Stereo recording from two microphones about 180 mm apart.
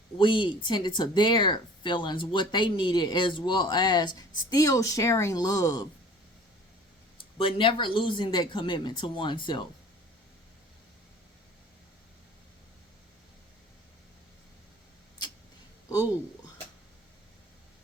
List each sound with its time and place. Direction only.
0.2 s speech: 25° left (ahead or behind)
7.3 s speech: 30° left (ahead or behind)